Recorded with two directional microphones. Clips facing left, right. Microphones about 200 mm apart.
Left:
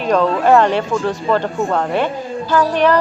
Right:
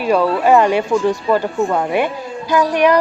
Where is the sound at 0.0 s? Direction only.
10° right (ahead or behind).